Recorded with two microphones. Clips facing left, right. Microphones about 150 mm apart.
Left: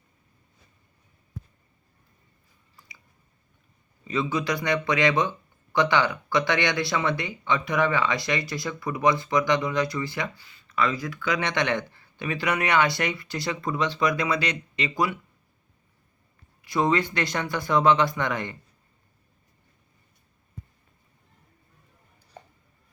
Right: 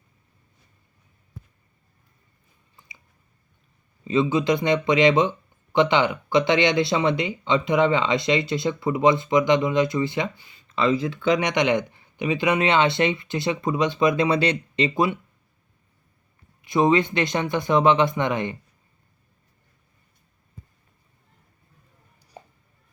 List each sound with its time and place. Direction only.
4.0 s speech: 20° right (ahead or behind)
16.6 s speech: 20° right (ahead or behind)
22.4 s a sound: 10° right (ahead or behind)